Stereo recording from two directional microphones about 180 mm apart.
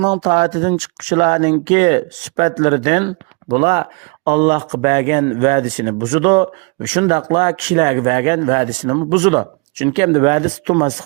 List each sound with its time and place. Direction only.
0.0 s speech: 35° right (ahead or behind)